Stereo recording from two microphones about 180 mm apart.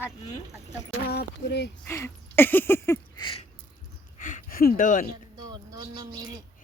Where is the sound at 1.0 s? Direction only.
65° left (ahead or behind).